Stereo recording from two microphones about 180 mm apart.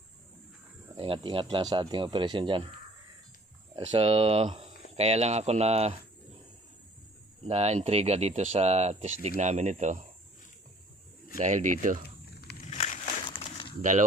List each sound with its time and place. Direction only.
0.9 s speech: 30° right (ahead or behind)
3.8 s speech: 30° right (ahead or behind)
7.4 s speech: 35° right (ahead or behind)
11.3 s speech: 45° right (ahead or behind)
12.7 s a sound: 40° left (ahead or behind)
13.2 s a sound: 25° left (ahead or behind)